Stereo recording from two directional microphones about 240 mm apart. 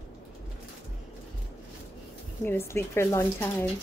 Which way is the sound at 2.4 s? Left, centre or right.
Centre.